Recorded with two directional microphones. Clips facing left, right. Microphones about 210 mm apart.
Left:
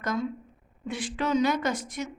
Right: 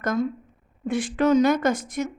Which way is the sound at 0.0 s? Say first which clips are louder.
Right 5 dB; 50° right (ahead or behind).